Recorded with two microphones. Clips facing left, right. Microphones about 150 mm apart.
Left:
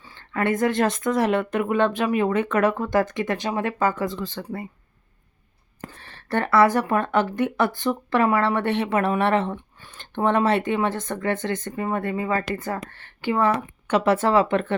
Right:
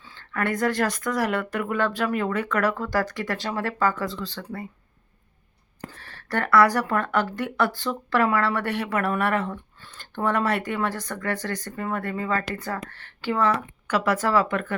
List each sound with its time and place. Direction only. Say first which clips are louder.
0.0 s speech: left 3 dB; 20° left (ahead or behind)
6.0 s speech: left 3 dB; 20° left (ahead or behind)